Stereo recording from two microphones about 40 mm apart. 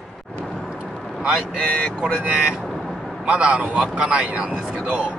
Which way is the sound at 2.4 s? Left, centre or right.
Right.